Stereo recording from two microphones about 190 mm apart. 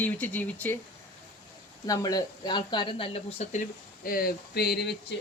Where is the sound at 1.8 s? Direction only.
20° left (ahead or behind).